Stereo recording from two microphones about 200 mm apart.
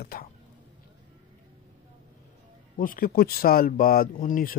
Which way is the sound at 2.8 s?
45° left (ahead or behind).